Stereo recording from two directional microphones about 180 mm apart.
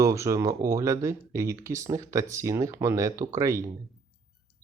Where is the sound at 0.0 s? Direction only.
15° right (ahead or behind).